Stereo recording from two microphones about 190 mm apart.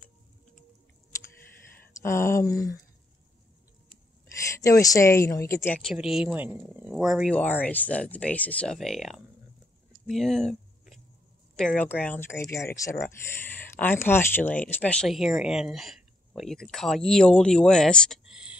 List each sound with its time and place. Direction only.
2.0 s speech: 15° left (ahead or behind)
4.6 s speech: 15° left (ahead or behind)
5.8 s speech: centre (ahead or behind)
10.0 s a sound: centre (ahead or behind)
11.8 s speech: 10° left (ahead or behind)